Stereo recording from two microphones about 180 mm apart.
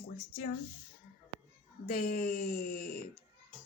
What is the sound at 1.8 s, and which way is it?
Speech, 55° left (ahead or behind).